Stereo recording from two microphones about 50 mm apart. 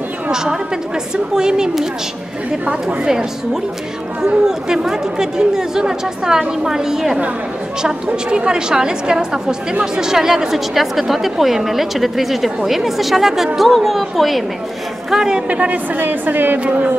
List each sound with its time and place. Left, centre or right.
1.1 s speech: centre
4.2 s a woman's voice: centre
15.4 s a woman's voice: right
16.5 s speech: right